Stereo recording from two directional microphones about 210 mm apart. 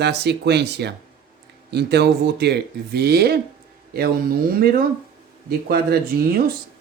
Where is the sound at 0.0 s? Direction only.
50° right (ahead or behind).